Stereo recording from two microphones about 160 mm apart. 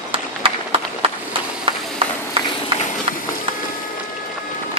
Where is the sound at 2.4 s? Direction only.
35° right (ahead or behind).